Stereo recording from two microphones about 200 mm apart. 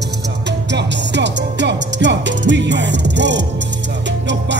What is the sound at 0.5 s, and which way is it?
Music, 60° right (ahead or behind).